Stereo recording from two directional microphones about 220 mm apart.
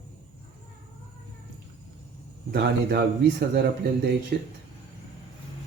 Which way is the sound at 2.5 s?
45° right (ahead or behind).